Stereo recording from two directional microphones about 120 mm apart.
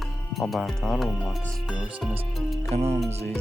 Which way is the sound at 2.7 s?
65° right (ahead or behind).